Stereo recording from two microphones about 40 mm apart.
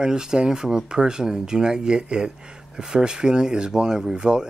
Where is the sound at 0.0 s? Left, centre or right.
Centre.